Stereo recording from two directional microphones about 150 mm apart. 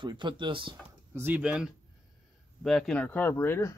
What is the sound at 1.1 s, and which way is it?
Speech, 10° right (ahead or behind).